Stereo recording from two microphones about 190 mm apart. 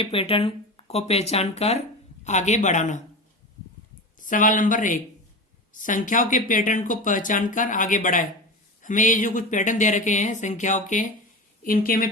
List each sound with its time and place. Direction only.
0.0 s speech: 30° left (ahead or behind)
4.2 s speech: 45° left (ahead or behind)